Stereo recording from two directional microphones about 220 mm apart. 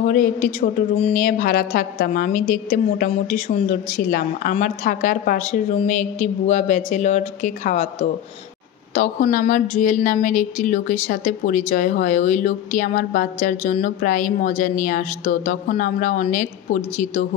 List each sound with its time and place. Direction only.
0.0 s a woman's voice: 40° left (ahead or behind)